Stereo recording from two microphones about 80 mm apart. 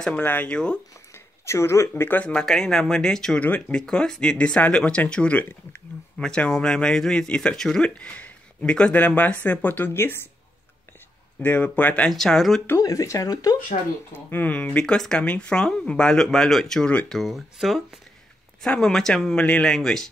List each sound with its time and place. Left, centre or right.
0.2 s speech: left
0.5 s speech: centre
1.1 s a sound: left
2.0 s speech: left
2.3 s speech: centre
3.3 s speech: centre
11.4 s speech: left
12.1 s speech: centre
12.7 s speech: left
14.1 s speech: left; by 20.1 s centre